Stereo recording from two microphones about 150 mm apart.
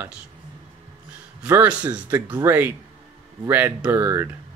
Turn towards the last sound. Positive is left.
turn(degrees=-15)  # may be behind; listen again after turning